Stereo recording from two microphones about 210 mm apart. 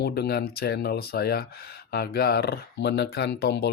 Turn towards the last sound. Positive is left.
turn(degrees=50)  # may be behind; listen again after turning